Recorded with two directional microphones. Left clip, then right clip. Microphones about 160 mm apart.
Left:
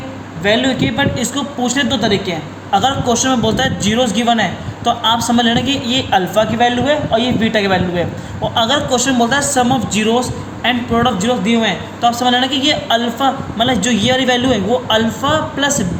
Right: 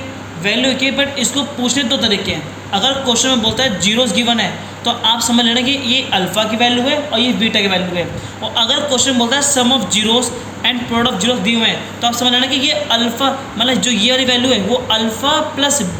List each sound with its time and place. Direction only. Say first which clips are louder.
0.4 s a man's voice: even; 45° left (ahead or behind)